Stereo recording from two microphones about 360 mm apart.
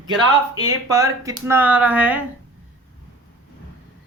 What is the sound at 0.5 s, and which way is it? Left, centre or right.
Speech, centre.